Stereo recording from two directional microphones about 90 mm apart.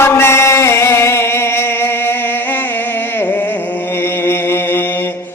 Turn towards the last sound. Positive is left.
turn(degrees=25)  # may be behind; listen again after turning